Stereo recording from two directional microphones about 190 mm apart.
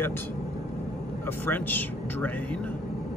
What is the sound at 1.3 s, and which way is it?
Speech, 10° left (ahead or behind).